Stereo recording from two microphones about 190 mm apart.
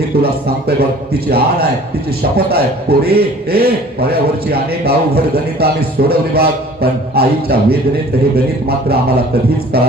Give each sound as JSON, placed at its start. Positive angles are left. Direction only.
{"t": 0.2, "sound": "a man's voice", "side_deg": -55}